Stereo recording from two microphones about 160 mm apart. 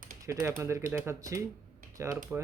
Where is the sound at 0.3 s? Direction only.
20° right (ahead or behind).